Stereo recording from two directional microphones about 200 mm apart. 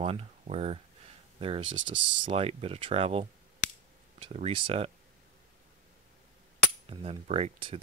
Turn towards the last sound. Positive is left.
turn(degrees=-25)  # may be behind; listen again after turning